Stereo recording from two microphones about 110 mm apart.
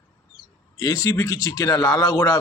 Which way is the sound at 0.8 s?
35° left (ahead or behind).